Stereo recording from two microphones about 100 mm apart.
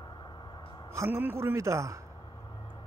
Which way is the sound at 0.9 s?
25° right (ahead or behind).